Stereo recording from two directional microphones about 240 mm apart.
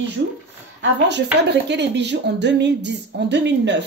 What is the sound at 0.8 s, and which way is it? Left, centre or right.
Speech, right.